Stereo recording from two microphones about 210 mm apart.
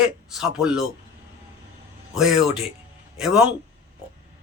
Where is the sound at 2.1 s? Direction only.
Centre (ahead or behind).